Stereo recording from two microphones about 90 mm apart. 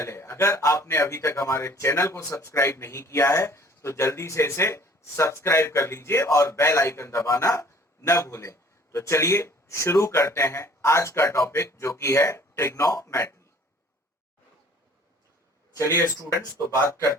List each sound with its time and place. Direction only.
0.0 s a man's voice: 30° left (ahead or behind)
16.9 s a man's voice: 35° left (ahead or behind)